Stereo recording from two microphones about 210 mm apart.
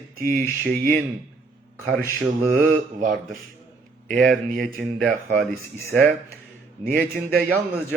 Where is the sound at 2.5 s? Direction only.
35° right (ahead or behind).